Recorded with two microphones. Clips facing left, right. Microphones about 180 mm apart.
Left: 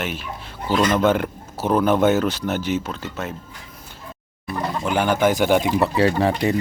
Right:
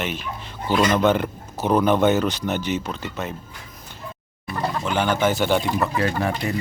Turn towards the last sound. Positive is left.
turn(degrees=35)  # may be behind; listen again after turning